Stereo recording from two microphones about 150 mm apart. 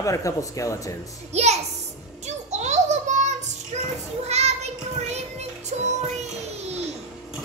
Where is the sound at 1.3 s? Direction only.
45° right (ahead or behind).